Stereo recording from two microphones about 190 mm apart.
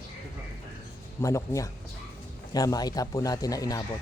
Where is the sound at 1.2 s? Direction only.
15° left (ahead or behind).